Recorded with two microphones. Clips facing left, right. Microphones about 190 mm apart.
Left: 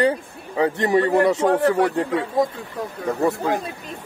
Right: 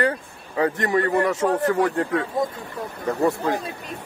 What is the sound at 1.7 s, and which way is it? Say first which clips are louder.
Speech: left 2 dB; 20° left (ahead or behind).